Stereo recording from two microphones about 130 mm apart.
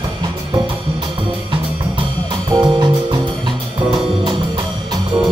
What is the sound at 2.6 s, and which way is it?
Music, 35° right (ahead or behind).